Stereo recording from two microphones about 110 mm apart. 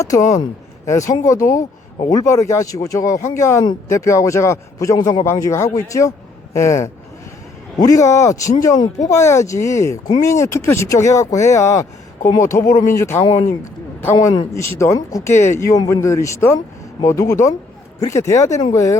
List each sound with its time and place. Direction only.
0.0 s speech: 30° left (ahead or behind)
4.9 s speech: 40° left (ahead or behind)
5.2 s speech: 25° left (ahead or behind)
14.8 s speech: 30° left (ahead or behind)